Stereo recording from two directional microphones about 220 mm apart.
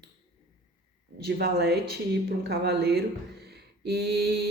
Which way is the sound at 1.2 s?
45° right (ahead or behind).